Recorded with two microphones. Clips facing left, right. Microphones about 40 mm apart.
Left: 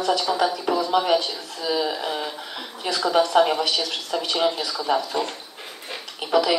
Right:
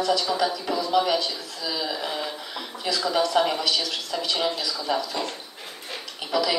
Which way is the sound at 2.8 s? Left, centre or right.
Centre.